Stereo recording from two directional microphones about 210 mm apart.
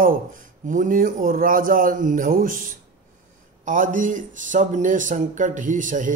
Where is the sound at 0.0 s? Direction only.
40° right (ahead or behind).